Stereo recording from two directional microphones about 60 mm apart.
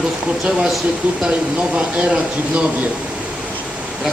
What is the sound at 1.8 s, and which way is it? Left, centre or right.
Speech, centre.